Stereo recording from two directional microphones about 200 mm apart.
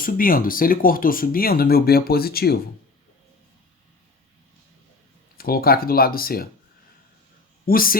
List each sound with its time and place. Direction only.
0.0 s speech: 45° left (ahead or behind)
5.4 s speech: 50° left (ahead or behind)
7.7 s speech: 45° left (ahead or behind)